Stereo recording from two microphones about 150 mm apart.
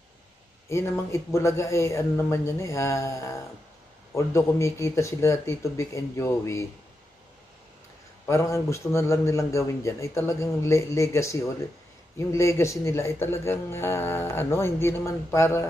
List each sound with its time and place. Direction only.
0.7 s a man's voice: 20° left (ahead or behind)
8.3 s a man's voice: 20° left (ahead or behind)